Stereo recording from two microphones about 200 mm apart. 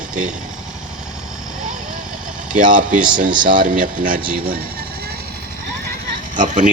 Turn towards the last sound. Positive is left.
turn(degrees=-40)  # may be behind; listen again after turning